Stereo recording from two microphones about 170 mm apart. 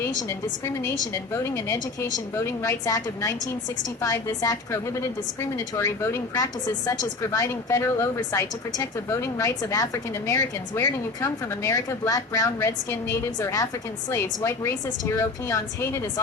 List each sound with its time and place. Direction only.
0.2 s a woman's voice: 15° left (ahead or behind)